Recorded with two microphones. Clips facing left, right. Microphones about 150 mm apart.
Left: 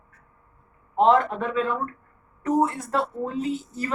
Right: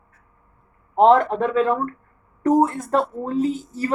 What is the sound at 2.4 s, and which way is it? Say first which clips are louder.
Speech: right 5 dB; 40° right (ahead or behind).